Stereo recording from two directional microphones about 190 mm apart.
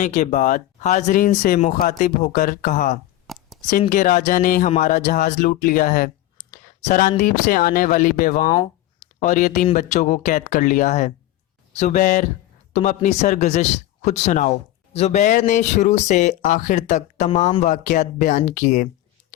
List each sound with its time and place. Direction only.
0.0 s speech: 40° left (ahead or behind)
3.3 s a sound: centre (ahead or behind)
3.7 s speech: 45° left (ahead or behind)
8.4 s speech: 30° left (ahead or behind)
9.2 s speech: 40° left (ahead or behind)